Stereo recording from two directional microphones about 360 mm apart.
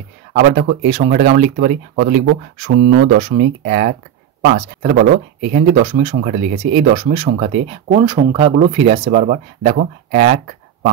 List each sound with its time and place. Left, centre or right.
0.3 s speech: right